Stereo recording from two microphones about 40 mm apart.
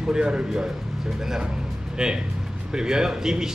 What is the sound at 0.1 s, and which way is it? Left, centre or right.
A man's voice, right.